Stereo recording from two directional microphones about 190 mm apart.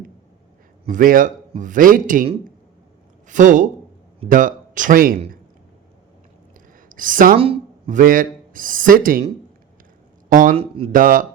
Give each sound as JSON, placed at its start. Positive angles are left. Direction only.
{"t": 0.9, "sound": "a man's voice", "side_deg": -45}
{"t": 3.2, "sound": "speech", "side_deg": -40}
{"t": 6.8, "sound": "a woman's voice", "side_deg": -45}
{"t": 7.3, "sound": "speech", "side_deg": -30}
{"t": 7.9, "sound": "a man's voice", "side_deg": -45}
{"t": 10.2, "sound": "a man's voice", "side_deg": -45}